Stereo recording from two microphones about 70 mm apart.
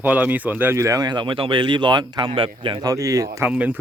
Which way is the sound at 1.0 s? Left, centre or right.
Right.